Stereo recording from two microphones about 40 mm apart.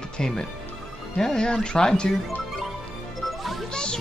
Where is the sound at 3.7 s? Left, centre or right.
Left.